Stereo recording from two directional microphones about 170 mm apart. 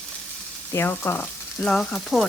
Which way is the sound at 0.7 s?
15° left (ahead or behind).